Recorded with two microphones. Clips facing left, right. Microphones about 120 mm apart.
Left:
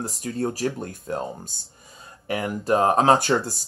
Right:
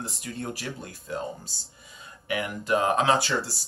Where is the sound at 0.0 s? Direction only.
40° left (ahead or behind).